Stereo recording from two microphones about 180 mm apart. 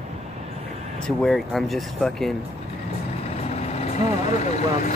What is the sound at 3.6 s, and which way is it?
Vehicle, 35° left (ahead or behind).